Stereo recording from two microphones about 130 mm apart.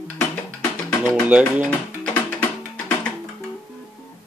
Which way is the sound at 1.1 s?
10° right (ahead or behind).